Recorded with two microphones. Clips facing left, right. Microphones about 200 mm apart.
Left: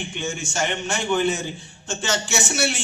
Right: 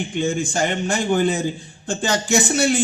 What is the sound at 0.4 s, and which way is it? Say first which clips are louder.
A man's voice: right 4 dB; 35° right (ahead or behind).